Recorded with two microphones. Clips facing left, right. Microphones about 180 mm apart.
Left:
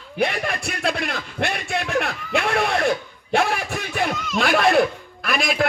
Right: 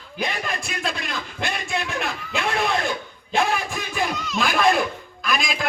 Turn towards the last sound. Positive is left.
turn(degrees=65)  # may be behind; listen again after turning